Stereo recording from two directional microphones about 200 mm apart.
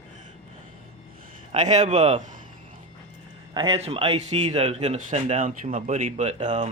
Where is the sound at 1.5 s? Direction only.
35° right (ahead or behind).